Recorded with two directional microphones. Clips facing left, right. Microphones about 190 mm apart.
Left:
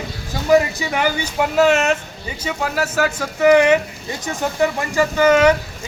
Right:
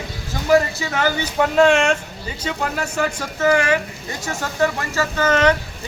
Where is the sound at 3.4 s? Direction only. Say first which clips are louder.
Left 5 dB; 20° left (ahead or behind).